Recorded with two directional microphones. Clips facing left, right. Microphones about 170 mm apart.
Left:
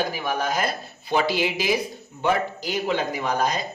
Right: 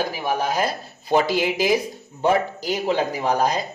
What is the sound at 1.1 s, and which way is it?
Speech, 40° right (ahead or behind).